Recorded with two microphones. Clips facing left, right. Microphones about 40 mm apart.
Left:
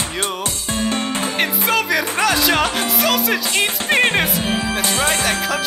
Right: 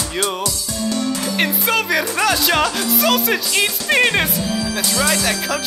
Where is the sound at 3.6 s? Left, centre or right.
Left.